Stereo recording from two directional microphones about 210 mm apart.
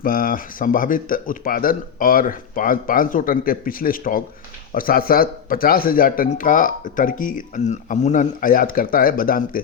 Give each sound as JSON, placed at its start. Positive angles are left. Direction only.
{"t": 0.0, "sound": "speech", "side_deg": 45}